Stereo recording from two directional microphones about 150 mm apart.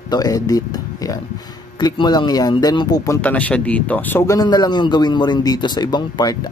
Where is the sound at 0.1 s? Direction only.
25° left (ahead or behind).